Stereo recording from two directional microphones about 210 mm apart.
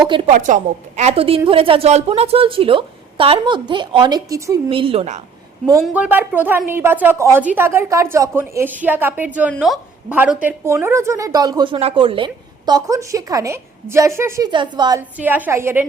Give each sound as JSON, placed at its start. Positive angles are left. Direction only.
{"t": 0.0, "sound": "a woman's voice", "side_deg": -20}
{"t": 0.3, "sound": "a woman's voice", "side_deg": -35}
{"t": 4.7, "sound": "a woman's voice", "side_deg": -25}
{"t": 5.8, "sound": "a woman's voice", "side_deg": -5}